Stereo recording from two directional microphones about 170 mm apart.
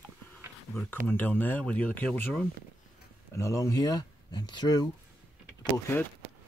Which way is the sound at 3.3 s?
15° left (ahead or behind).